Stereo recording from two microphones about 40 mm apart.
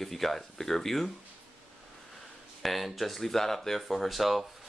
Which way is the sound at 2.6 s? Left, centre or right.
Centre.